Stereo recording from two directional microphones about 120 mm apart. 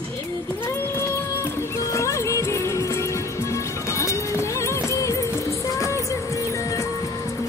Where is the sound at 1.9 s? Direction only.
25° left (ahead or behind).